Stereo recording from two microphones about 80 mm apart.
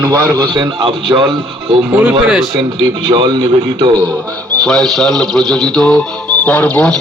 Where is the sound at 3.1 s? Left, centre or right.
Right.